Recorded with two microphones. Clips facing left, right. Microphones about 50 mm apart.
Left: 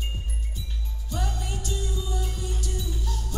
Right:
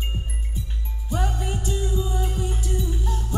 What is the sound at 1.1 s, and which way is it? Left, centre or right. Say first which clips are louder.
Music: right 5 dB; right.